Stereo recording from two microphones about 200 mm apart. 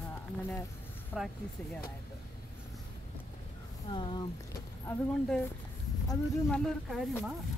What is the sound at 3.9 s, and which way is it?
Speech, 25° left (ahead or behind).